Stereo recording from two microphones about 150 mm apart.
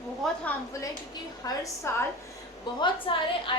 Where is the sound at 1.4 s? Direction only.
20° left (ahead or behind).